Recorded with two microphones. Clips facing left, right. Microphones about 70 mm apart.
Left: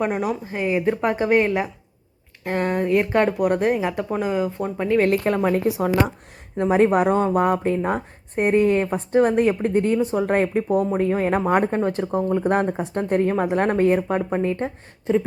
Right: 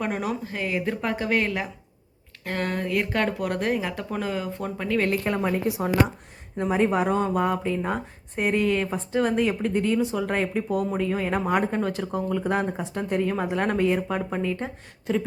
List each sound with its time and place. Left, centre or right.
0.0 s speech: centre
5.6 s speech: left
6.9 s speech: left
12.5 s speech: left
12.9 s speech: left
14.6 s speech: centre